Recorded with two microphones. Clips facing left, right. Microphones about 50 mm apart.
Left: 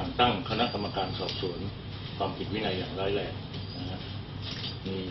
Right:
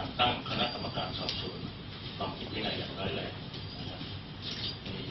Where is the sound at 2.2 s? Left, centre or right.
Centre.